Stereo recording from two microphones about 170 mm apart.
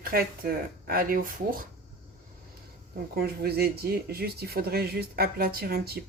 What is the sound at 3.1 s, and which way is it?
Speech, 65° right (ahead or behind).